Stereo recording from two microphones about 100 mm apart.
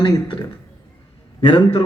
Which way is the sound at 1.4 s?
60° left (ahead or behind).